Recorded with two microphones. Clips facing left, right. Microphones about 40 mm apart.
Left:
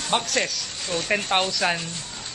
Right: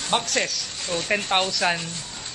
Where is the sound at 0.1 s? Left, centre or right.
Centre.